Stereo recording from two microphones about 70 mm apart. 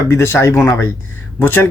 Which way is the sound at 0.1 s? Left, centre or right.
Left.